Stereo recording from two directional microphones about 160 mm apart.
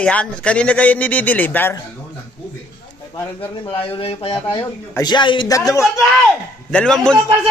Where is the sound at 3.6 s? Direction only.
35° left (ahead or behind).